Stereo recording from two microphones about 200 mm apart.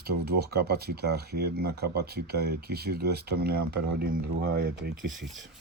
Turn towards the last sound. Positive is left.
turn(degrees=-55)  # may be behind; listen again after turning